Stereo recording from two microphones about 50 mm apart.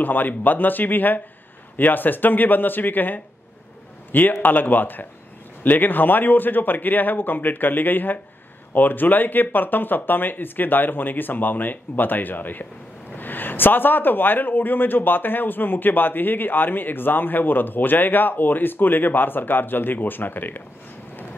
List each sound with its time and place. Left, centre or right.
0.0 s a man's voice: left